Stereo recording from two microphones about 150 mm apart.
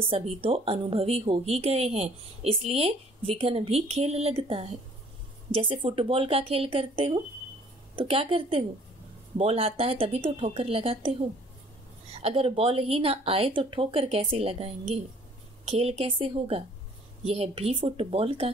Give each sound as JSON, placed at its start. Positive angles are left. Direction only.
{"t": 0.1, "sound": "a woman's voice", "side_deg": -40}